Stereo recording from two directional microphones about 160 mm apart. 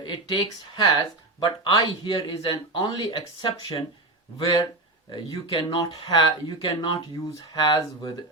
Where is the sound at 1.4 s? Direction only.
30° left (ahead or behind).